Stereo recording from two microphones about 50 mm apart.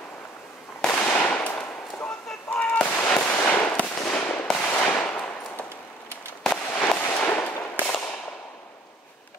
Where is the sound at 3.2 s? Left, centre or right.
Left.